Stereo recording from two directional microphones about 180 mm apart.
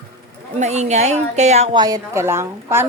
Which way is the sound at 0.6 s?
40° right (ahead or behind).